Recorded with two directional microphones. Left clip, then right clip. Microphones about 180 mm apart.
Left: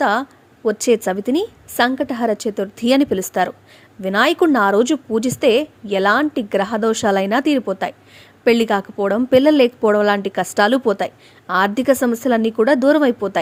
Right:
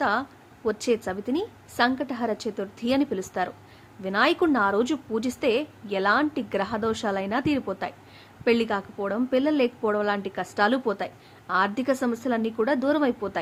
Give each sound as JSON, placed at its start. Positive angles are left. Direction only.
{"t": 0.0, "sound": "a woman's voice", "side_deg": 40}